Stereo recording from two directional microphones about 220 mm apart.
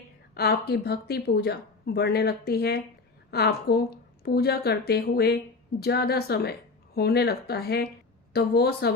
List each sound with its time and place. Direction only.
0.3 s speech: 45° left (ahead or behind)